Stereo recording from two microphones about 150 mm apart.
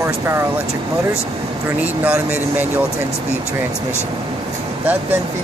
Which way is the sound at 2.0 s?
10° right (ahead or behind).